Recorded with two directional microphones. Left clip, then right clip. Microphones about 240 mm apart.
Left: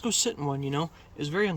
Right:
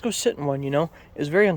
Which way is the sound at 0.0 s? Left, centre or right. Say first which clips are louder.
Right 5 dB; centre.